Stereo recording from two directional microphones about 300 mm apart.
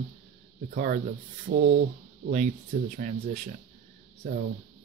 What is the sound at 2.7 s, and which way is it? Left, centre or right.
Speech, right.